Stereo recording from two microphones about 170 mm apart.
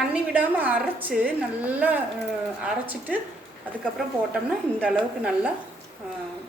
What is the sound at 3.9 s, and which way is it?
Speech, 5° right (ahead or behind).